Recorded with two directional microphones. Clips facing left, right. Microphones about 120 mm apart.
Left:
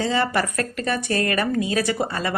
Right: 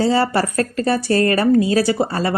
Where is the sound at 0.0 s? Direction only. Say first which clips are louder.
Right 5 dB; 35° right (ahead or behind).